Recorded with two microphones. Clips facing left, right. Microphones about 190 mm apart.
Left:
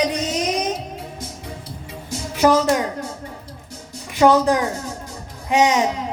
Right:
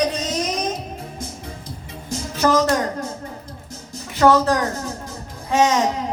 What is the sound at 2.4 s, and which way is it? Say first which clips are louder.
Speech: left 2 dB; 15° left (ahead or behind).